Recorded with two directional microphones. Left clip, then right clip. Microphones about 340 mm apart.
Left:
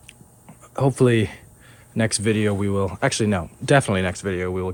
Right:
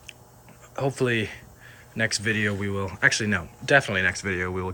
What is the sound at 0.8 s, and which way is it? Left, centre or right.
Speech, centre.